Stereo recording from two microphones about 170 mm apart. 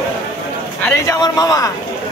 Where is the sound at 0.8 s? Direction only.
10° left (ahead or behind).